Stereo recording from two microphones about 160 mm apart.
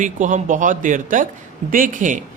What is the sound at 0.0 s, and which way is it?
Speech, 50° right (ahead or behind).